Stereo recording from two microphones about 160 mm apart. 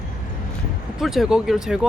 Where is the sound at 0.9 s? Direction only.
Centre (ahead or behind).